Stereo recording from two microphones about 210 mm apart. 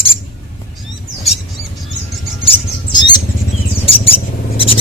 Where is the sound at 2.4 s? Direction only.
25° left (ahead or behind).